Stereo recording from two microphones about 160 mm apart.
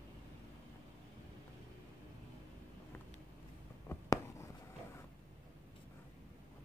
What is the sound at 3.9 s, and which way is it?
Writing, 20° left (ahead or behind).